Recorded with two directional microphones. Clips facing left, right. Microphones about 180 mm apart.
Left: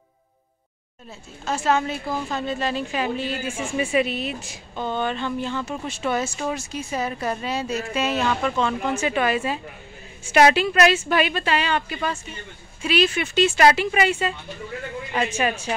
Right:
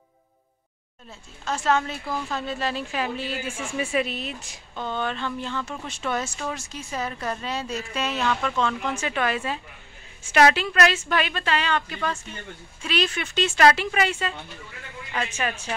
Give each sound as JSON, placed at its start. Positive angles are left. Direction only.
{"t": 1.4, "sound": "speech", "side_deg": 5}
{"t": 2.0, "sound": "speech", "side_deg": 20}
{"t": 2.3, "sound": "a woman's voice", "side_deg": 0}